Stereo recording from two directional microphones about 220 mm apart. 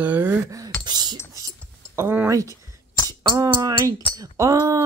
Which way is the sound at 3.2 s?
20° right (ahead or behind).